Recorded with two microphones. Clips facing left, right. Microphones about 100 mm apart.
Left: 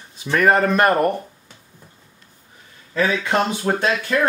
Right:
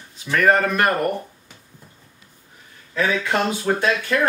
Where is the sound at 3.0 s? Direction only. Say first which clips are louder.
Even; 20° left (ahead or behind).